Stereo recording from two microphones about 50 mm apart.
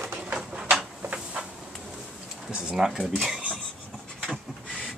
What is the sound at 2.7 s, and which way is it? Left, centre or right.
Speech, centre.